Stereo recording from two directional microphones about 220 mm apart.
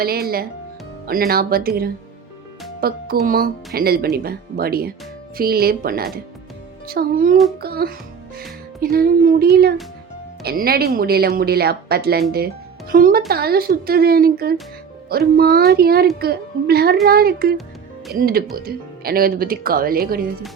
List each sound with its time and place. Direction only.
0.0 s speech: 45° right (ahead or behind)